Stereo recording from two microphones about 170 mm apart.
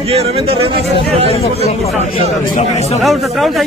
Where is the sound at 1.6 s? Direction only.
40° left (ahead or behind).